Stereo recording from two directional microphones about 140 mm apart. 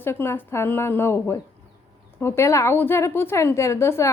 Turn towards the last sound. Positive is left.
turn(degrees=20)  # may be behind; listen again after turning